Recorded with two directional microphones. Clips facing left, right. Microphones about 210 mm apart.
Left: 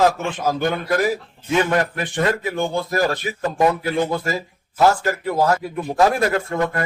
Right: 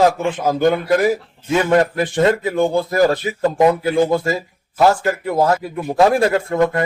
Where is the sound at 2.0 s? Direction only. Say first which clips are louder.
Right 6 dB; 35° right (ahead or behind).